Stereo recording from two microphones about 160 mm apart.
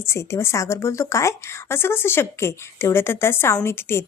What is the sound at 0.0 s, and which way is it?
A woman's voice, 15° left (ahead or behind).